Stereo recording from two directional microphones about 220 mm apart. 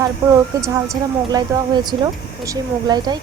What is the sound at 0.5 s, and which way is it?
A woman's voice, 15° right (ahead or behind).